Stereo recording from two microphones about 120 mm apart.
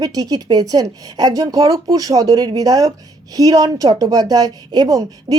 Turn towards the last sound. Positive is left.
turn(degrees=-30)  # may be behind; listen again after turning